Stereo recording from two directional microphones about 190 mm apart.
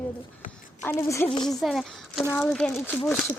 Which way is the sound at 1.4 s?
Centre (ahead or behind).